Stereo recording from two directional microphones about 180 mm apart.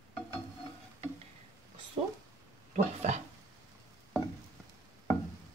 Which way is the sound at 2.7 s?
40° right (ahead or behind).